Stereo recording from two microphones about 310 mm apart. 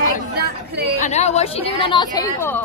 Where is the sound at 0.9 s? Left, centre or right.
Left.